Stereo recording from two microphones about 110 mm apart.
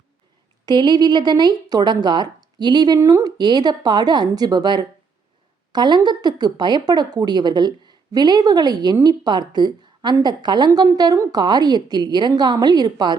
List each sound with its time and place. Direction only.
0.6 s a woman's voice: 40° right (ahead or behind)